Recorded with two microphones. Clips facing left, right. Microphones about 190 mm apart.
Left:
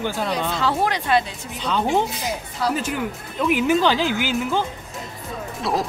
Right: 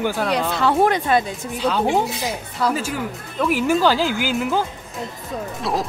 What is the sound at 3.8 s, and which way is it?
Speech, 5° right (ahead or behind).